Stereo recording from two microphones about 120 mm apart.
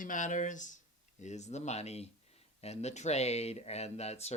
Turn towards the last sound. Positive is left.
turn(degrees=60)  # may be behind; listen again after turning